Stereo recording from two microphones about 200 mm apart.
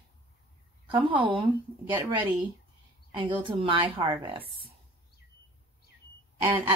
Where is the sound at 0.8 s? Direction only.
25° right (ahead or behind).